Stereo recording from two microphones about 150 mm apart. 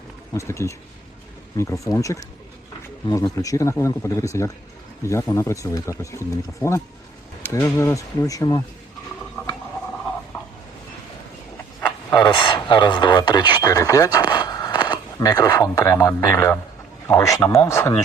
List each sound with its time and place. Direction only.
0.3 s speech: 20° left (ahead or behind)
3.3 s speech: 20° left (ahead or behind)
12.1 s speech: 30° left (ahead or behind)